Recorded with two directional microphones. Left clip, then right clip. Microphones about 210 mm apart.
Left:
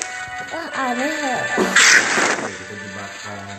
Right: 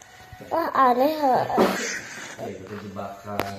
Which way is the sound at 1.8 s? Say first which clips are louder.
Left 19 dB; 50° left (ahead or behind).